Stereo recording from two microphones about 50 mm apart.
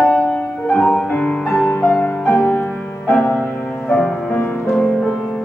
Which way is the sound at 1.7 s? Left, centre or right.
Left.